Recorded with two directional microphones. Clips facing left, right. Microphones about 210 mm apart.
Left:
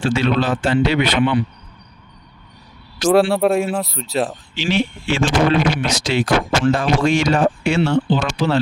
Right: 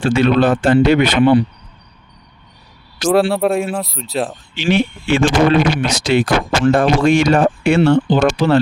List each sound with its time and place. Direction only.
0.0 s a man's voice: 55° right (ahead or behind)
3.1 s speech: centre (ahead or behind)
4.5 s speech: 55° right (ahead or behind)